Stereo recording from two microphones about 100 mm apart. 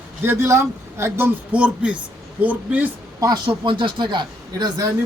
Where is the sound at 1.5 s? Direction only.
10° right (ahead or behind).